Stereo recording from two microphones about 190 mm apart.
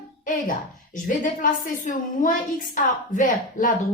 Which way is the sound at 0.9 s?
45° left (ahead or behind).